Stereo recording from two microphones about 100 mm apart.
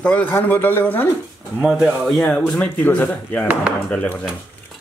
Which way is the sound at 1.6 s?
Centre (ahead or behind).